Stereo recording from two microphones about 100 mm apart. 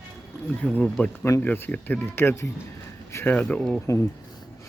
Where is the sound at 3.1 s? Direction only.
25° left (ahead or behind).